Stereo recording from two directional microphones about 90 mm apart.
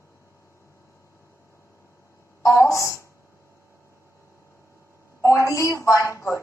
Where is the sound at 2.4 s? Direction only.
35° left (ahead or behind).